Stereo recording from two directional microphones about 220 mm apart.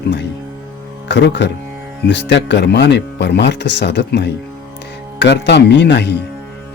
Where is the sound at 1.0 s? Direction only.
55° left (ahead or behind).